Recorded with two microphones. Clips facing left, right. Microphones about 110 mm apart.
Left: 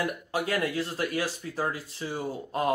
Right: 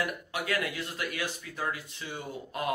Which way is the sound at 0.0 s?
30° left (ahead or behind).